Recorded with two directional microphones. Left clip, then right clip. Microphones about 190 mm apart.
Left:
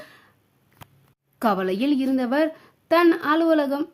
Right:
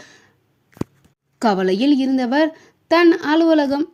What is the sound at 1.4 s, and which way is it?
Speech, 15° right (ahead or behind).